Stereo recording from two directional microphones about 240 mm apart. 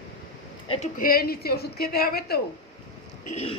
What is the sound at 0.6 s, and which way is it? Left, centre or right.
A woman's voice, left.